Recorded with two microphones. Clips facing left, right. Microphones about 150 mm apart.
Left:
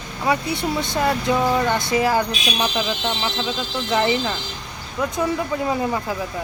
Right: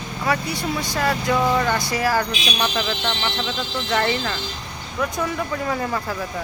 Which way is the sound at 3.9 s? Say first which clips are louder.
Left 2 dB; 15° left (ahead or behind).